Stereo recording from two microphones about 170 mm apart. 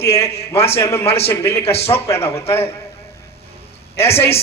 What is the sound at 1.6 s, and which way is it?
Speech, 35° left (ahead or behind).